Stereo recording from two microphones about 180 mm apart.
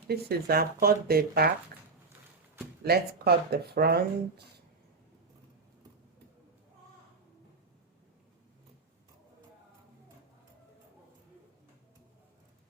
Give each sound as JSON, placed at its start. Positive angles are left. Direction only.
{"t": 0.1, "sound": "speech", "side_deg": -60}
{"t": 2.8, "sound": "speech", "side_deg": -60}